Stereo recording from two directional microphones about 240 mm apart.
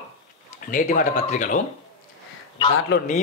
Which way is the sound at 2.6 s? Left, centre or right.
Left.